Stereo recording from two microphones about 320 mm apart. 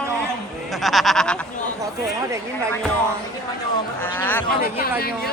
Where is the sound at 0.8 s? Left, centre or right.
Centre.